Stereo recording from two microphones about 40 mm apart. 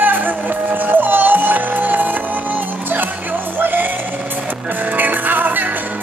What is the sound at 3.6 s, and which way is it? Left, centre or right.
Music, right.